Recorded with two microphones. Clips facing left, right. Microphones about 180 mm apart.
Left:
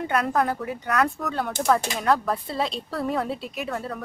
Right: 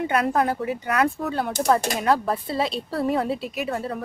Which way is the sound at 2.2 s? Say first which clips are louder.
Right 2 dB; 5° right (ahead or behind).